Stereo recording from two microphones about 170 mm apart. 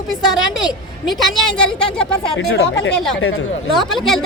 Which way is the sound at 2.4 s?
80° left.